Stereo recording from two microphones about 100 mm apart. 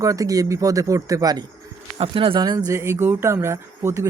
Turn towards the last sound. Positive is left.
turn(degrees=-30)  # may be behind; listen again after turning